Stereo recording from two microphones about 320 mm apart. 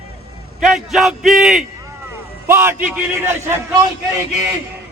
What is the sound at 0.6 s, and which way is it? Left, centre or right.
A man's voice, centre.